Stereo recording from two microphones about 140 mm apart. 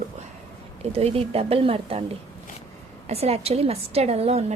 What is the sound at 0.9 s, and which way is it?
A woman's voice, 45° right (ahead or behind).